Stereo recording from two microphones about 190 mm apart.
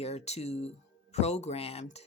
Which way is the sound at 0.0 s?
35° left (ahead or behind).